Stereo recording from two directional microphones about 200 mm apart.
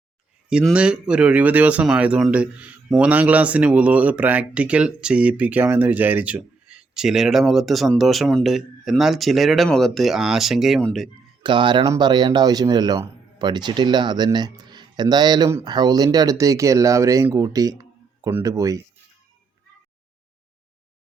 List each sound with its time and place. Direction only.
0.5 s speech: 5° right (ahead or behind)
11.4 s speech: 25° right (ahead or behind)